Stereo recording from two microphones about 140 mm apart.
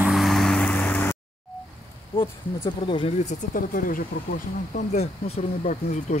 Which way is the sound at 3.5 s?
85° left.